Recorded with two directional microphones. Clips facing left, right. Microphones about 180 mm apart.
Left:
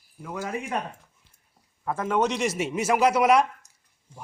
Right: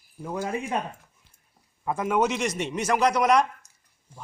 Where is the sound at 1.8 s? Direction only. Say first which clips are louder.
Right 1 dB; 15° right (ahead or behind); by 3.5 s 5° left (ahead or behind).